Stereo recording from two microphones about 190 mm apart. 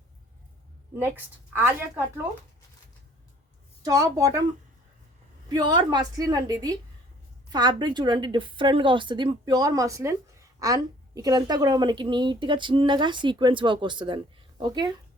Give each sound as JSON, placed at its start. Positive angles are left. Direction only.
{"t": 0.9, "sound": "a woman's voice", "side_deg": -10}
{"t": 3.8, "sound": "a woman's voice", "side_deg": -20}
{"t": 5.5, "sound": "a woman's voice", "side_deg": -25}